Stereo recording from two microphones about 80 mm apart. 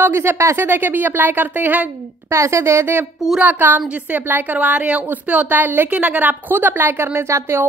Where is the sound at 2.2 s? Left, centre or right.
Right.